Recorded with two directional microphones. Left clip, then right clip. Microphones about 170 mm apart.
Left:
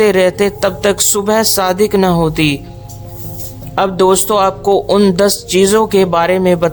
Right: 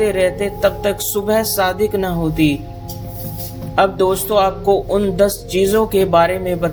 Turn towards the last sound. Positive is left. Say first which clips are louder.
# left 4 dB
turn(degrees=40)  # may be behind; listen again after turning